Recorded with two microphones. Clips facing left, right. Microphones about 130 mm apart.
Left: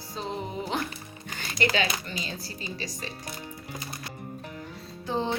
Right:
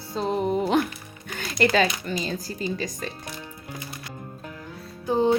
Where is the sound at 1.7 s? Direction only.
45° right (ahead or behind).